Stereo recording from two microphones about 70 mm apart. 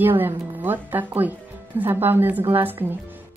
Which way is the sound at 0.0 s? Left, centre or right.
Right.